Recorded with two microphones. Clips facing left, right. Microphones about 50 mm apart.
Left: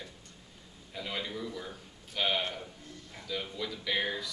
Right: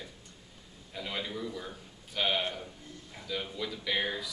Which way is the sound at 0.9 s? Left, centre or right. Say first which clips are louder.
Even; centre.